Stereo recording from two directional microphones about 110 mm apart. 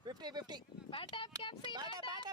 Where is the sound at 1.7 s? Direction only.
40° right (ahead or behind).